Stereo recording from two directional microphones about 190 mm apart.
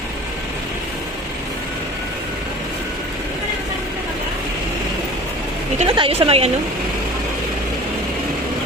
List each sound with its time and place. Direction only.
5.8 s a woman's voice: 30° right (ahead or behind)